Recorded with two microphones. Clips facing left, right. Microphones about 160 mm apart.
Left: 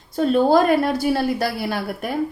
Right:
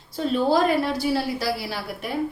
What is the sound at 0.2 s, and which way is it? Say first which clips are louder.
A woman's voice: left 5 dB; 50° left (ahead or behind).